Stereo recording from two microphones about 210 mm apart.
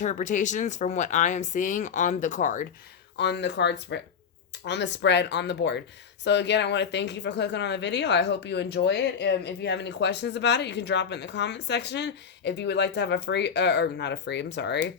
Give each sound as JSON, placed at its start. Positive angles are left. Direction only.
{"t": 0.0, "sound": "speech", "side_deg": 35}
{"t": 3.2, "sound": "speech", "side_deg": 55}